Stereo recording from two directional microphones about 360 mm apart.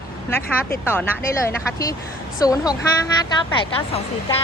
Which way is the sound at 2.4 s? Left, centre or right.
Centre.